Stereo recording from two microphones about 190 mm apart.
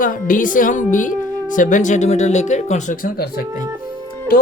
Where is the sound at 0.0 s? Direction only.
45° left (ahead or behind).